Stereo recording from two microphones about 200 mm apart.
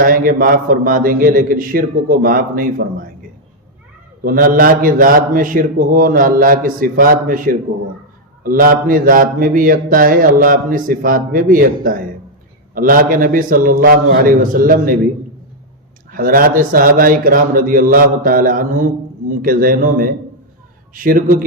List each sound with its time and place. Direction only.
0.0 s a man's voice: 45° right (ahead or behind)
4.2 s a man's voice: 45° right (ahead or behind)
16.1 s a man's voice: 45° right (ahead or behind)